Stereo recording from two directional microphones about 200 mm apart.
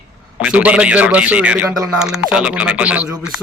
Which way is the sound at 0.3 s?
5° right (ahead or behind).